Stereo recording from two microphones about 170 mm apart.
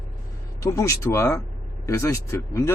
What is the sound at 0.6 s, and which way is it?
Speech, 20° left (ahead or behind).